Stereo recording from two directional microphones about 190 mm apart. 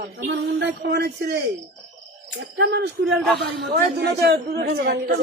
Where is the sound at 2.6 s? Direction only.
65° right (ahead or behind).